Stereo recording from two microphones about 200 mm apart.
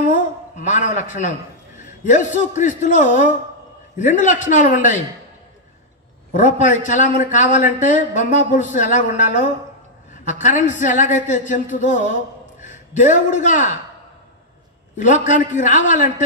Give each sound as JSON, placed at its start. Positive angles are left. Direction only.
{"t": 0.6, "sound": "speech", "side_deg": 40}
{"t": 6.3, "sound": "a man's voice", "side_deg": 40}
{"t": 15.0, "sound": "speech", "side_deg": 40}